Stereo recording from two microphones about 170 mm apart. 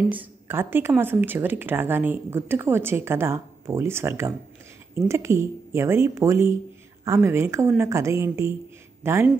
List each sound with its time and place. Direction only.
0.1 s speech: 10° right (ahead or behind)